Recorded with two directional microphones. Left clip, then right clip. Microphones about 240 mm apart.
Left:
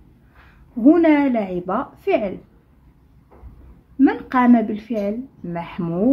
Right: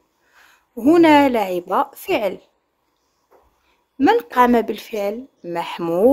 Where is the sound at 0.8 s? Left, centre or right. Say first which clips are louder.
Right 2 dB; right.